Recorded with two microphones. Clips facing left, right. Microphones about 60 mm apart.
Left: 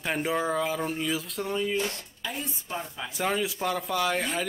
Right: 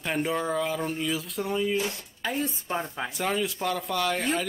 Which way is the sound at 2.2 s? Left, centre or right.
Right.